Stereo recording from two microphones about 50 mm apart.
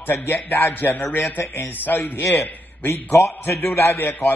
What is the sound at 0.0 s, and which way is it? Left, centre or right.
A man's voice, left.